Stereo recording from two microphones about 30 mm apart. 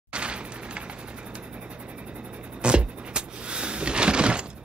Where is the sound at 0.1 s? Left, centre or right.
Right.